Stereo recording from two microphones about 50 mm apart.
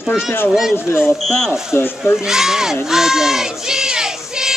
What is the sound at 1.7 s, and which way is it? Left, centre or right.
Speech, left.